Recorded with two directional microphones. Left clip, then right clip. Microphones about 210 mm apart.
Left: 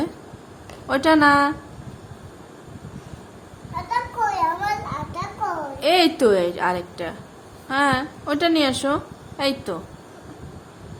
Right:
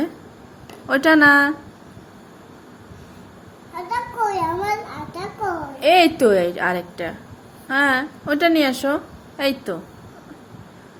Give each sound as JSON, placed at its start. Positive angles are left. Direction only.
{"t": 0.9, "sound": "a woman's voice", "side_deg": -10}
{"t": 3.8, "sound": "a sound", "side_deg": 15}
{"t": 5.8, "sound": "a woman's voice", "side_deg": -10}